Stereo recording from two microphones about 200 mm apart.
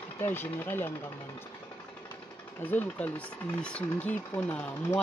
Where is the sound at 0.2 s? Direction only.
10° left (ahead or behind).